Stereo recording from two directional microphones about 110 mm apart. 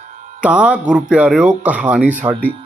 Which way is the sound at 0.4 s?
10° right (ahead or behind).